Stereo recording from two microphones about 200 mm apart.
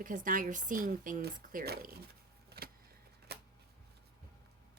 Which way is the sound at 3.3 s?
55° right (ahead or behind).